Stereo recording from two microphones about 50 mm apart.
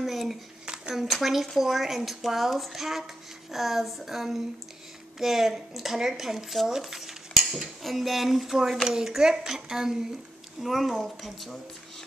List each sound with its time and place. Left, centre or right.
0.0 s hands: centre
0.9 s speech: centre
6.7 s cutlery: centre
8.8 s a woman's voice: centre